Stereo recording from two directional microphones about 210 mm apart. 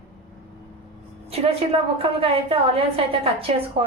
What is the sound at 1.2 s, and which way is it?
A woman's voice, 30° right (ahead or behind).